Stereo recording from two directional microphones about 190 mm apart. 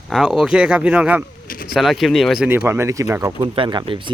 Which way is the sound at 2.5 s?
15° right (ahead or behind).